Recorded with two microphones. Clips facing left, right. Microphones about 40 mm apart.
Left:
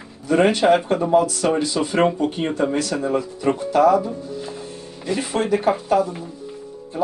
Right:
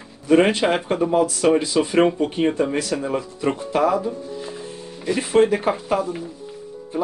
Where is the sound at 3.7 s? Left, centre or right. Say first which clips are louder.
Left 4 dB; right.